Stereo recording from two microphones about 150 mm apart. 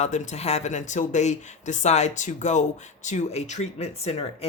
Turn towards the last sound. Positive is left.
turn(degrees=45)  # may be behind; listen again after turning